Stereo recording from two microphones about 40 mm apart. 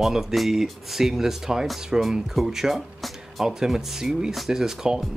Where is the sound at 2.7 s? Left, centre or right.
Centre.